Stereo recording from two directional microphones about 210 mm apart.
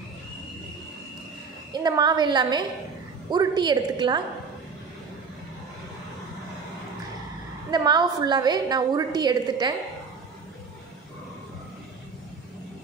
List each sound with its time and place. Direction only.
1.7 s a woman's voice: 20° right (ahead or behind)
7.7 s a woman's voice: 20° right (ahead or behind)